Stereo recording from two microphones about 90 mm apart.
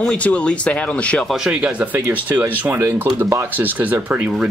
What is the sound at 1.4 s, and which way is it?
Speech, 15° right (ahead or behind).